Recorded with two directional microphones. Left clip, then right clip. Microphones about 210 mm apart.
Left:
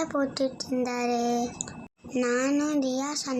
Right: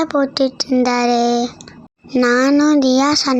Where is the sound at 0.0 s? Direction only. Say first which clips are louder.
Right 11 dB; 35° right (ahead or behind).